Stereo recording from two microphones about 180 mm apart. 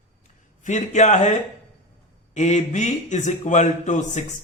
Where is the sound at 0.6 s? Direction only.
40° left (ahead or behind).